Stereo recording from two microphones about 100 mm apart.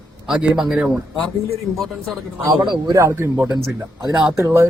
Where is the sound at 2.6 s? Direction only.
50° right (ahead or behind).